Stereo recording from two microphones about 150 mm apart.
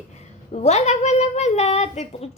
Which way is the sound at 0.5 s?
50° left (ahead or behind).